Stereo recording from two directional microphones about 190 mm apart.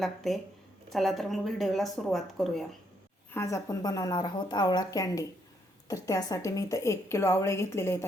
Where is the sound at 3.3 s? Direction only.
15° left (ahead or behind).